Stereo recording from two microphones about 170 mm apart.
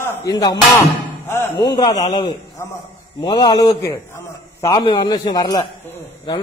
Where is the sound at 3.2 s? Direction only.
25° left (ahead or behind).